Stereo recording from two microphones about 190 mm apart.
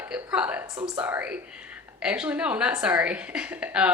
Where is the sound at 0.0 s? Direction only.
10° right (ahead or behind).